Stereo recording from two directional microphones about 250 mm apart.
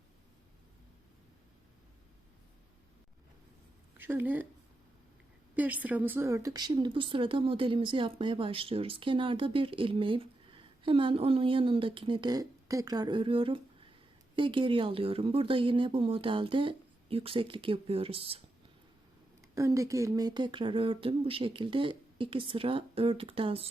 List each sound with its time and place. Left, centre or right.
3.9 s speech: centre
5.5 s speech: centre; by 18.4 s right
19.5 s speech: centre